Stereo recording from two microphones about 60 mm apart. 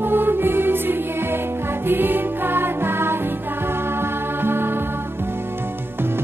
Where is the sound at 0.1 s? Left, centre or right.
Right.